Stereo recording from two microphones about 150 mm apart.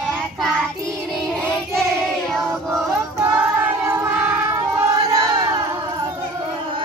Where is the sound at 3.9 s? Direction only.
15° right (ahead or behind).